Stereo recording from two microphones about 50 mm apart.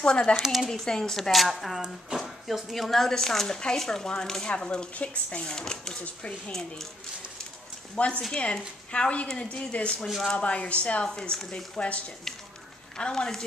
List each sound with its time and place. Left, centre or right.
0.0 s speech: centre
0.4 s speech: centre
0.7 s speech: centre
1.3 s speech: centre
4.6 s speech: left
7.9 s speech: left